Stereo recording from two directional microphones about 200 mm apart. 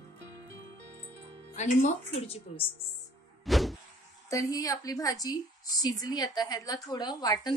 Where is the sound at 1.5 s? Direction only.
35° left (ahead or behind).